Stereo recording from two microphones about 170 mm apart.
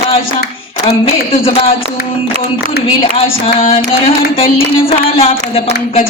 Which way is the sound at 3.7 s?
35° left (ahead or behind).